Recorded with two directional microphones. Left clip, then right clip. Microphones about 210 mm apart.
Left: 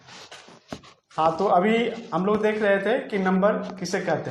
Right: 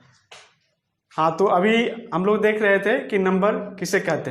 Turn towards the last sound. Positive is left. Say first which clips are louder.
# right 3 dB
turn(degrees=-45)  # may be behind; listen again after turning